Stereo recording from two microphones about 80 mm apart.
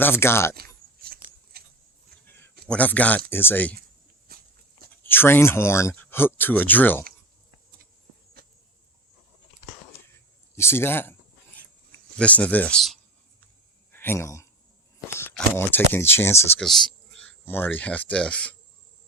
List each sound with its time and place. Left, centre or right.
0.0 s speech: left
2.2 s a sound: left
2.6 s speech: centre
5.0 s speech: left
10.5 s speech: left
11.5 s a sound: left
12.7 s speech: centre
13.9 s speech: left
15.0 s a sound: left
15.5 s speech: left
16.6 s speech: centre
17.2 s speech: left